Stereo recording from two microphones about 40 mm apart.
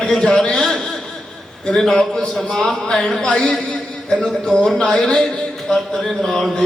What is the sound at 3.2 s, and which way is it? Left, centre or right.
A man's voice, left.